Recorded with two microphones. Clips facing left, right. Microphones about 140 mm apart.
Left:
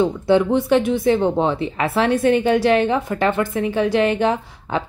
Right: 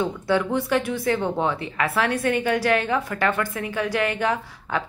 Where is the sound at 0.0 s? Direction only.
25° left (ahead or behind).